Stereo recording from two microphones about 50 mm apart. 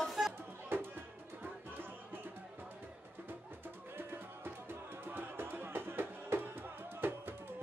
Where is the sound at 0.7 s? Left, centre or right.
Right.